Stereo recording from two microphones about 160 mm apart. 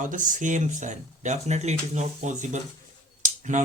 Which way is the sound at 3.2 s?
50° right (ahead or behind).